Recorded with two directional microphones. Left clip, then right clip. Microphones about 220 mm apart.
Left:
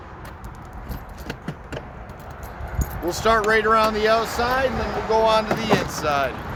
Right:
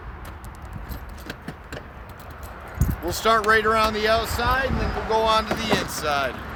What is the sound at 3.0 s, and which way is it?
Speech, 10° right (ahead or behind).